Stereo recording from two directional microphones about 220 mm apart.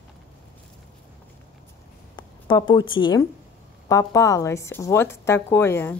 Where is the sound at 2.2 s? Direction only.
20° left (ahead or behind).